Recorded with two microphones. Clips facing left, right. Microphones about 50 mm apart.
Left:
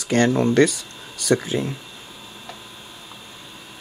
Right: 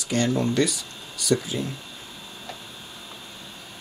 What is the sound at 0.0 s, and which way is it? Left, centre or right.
Speech, left.